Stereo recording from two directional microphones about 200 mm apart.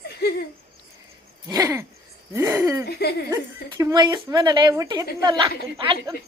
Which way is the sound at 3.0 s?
50° left (ahead or behind).